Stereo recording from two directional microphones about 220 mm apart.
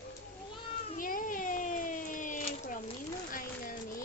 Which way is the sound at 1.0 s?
40° left (ahead or behind).